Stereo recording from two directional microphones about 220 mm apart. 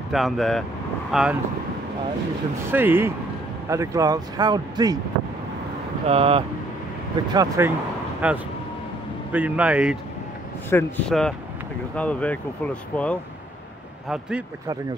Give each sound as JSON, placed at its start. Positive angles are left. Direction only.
{"t": 0.1, "sound": "speech", "side_deg": 0}
{"t": 2.7, "sound": "speech", "side_deg": -10}
{"t": 6.0, "sound": "speech", "side_deg": -25}
{"t": 7.3, "sound": "speech", "side_deg": -15}
{"t": 10.7, "sound": "speech", "side_deg": 5}